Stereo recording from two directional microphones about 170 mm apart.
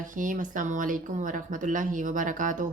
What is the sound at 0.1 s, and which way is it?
Speech, 50° right (ahead or behind).